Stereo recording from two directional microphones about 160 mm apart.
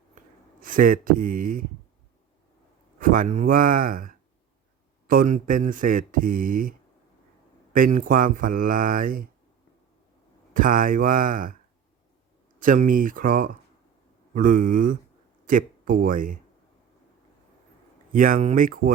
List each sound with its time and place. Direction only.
0.6 s speech: 60° right (ahead or behind)
3.0 s speech: 60° right (ahead or behind)
10.5 s speech: 60° right (ahead or behind)
12.5 s speech: 55° right (ahead or behind)
18.1 s speech: 60° right (ahead or behind)